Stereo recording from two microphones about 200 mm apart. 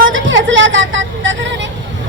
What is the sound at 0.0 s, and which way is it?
Vehicle, 70° right (ahead or behind).